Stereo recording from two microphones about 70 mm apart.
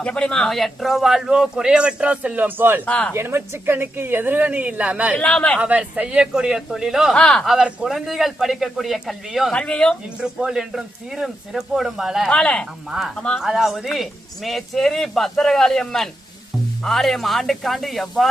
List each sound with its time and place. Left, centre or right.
0.0 s speech: centre
0.5 s a man's voice: centre; by 2.8 s right
2.8 s speech: centre
3.1 s a woman's voice: right; by 5.1 s centre
5.1 s speech: centre
5.5 s a man's voice: centre
7.1 s speech: centre
7.4 s speech: centre
9.5 s speech: centre
10.2 s speech: centre
12.3 s speech: centre
13.4 s speech: centre